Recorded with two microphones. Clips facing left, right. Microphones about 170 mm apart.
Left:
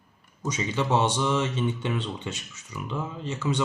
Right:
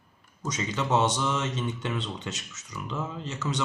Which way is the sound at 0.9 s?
30° left (ahead or behind).